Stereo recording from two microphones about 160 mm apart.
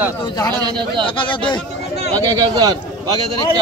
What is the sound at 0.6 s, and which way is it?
Speech, 30° right (ahead or behind).